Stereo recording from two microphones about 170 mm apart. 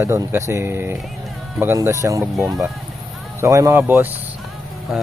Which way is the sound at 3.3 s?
15° right (ahead or behind).